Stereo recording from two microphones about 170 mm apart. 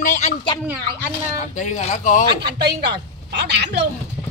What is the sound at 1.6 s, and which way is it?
Speech, 45° left (ahead or behind).